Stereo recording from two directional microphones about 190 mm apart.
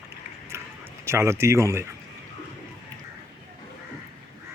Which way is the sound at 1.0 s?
15° right (ahead or behind).